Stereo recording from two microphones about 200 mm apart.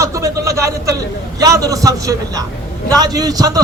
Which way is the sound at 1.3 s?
15° right (ahead or behind).